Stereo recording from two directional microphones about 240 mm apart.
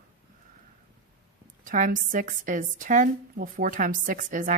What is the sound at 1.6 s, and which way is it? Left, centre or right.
A woman's voice, right.